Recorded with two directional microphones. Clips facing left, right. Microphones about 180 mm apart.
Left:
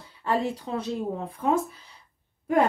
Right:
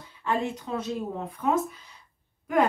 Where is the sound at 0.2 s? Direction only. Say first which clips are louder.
Left 2 dB; 35° left (ahead or behind).